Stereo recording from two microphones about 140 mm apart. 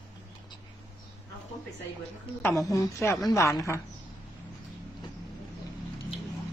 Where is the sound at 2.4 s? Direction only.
20° left (ahead or behind).